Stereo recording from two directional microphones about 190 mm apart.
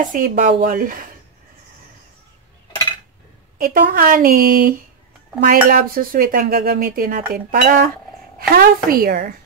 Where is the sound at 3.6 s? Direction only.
50° right (ahead or behind).